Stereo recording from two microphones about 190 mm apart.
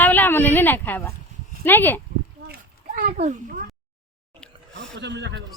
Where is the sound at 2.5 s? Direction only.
45° right (ahead or behind).